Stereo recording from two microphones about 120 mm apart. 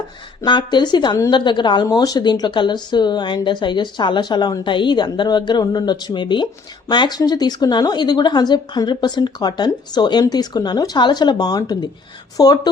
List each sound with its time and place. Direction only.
0.4 s speech: 40° left (ahead or behind)